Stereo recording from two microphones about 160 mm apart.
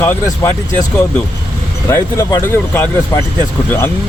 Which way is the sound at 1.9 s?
20° left (ahead or behind).